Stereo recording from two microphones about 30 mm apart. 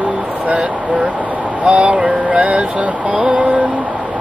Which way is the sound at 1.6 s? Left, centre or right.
Right.